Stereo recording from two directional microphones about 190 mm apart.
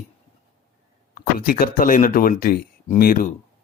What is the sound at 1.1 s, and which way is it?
Speech, 50° left (ahead or behind).